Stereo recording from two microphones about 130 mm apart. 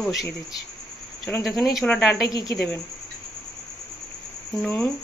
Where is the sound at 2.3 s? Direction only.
30° left (ahead or behind).